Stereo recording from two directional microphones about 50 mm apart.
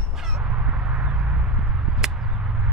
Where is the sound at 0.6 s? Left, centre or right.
Right.